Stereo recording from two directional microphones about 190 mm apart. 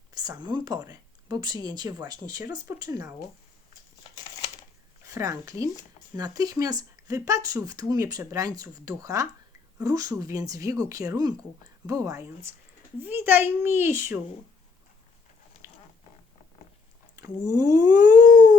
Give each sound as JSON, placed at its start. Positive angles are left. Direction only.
{"t": 0.1, "sound": "speech", "side_deg": -20}
{"t": 4.1, "sound": "a sound", "side_deg": 20}
{"t": 5.0, "sound": "speech", "side_deg": -15}
{"t": 17.2, "sound": "speech", "side_deg": -20}